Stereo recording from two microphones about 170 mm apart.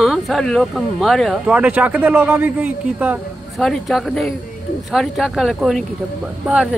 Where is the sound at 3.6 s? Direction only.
Centre (ahead or behind).